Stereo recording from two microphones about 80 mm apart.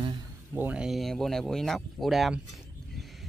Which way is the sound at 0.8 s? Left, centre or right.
Centre.